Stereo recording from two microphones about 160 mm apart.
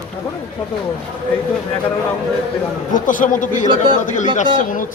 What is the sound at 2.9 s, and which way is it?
Speech, 55° left (ahead or behind).